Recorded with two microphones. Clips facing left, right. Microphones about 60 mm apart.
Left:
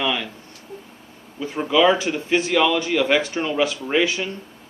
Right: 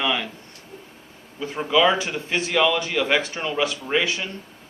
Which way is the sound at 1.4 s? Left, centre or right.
Centre.